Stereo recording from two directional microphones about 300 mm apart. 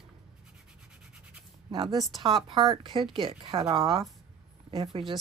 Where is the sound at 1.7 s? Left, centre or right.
Centre.